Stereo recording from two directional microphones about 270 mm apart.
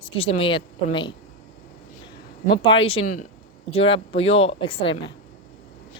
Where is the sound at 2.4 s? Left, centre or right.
Centre.